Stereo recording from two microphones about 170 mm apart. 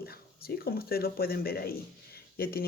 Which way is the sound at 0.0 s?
65° left (ahead or behind).